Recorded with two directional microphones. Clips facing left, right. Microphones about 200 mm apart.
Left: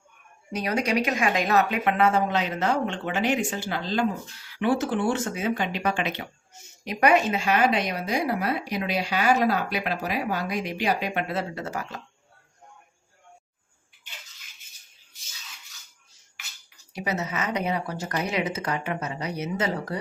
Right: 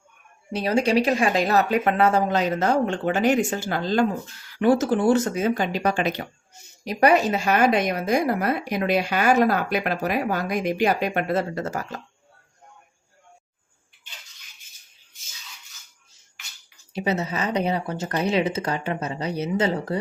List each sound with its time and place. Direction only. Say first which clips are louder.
0.5 s speech: right 5 dB; 30° right (ahead or behind)
16.9 s speech: right 4 dB; 25° right (ahead or behind)